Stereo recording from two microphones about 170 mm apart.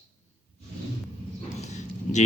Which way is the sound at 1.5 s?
40° left (ahead or behind).